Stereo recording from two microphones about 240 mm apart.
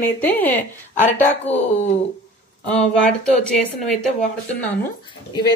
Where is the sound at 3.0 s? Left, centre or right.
Centre.